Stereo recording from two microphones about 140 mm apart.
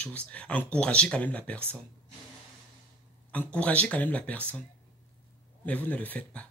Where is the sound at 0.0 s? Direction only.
10° left (ahead or behind).